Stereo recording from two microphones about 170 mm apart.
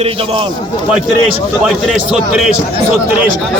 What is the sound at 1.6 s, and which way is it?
Speech, centre (ahead or behind).